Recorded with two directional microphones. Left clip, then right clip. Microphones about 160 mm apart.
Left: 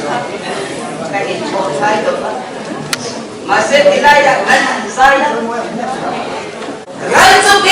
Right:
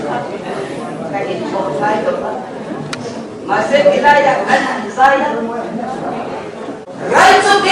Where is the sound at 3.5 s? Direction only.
10° right (ahead or behind).